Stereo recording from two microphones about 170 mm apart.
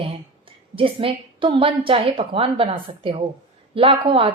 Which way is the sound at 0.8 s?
30° right (ahead or behind).